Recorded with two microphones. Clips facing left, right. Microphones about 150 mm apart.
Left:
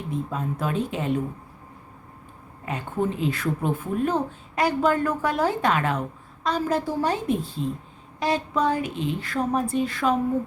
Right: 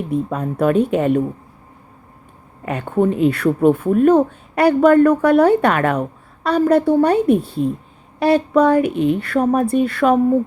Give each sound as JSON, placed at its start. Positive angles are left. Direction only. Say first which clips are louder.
{"t": 0.1, "sound": "speech", "louder": "right 6 dB", "side_deg": -65}
{"t": 2.6, "sound": "speech", "louder": "right 9 dB", "side_deg": -65}